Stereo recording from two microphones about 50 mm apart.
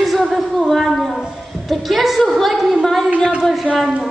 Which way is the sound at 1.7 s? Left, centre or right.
Centre.